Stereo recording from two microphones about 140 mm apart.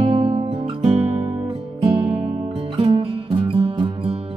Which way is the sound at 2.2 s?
40° right (ahead or behind).